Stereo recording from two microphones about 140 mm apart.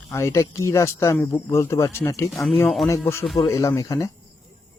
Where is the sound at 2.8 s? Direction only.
20° left (ahead or behind).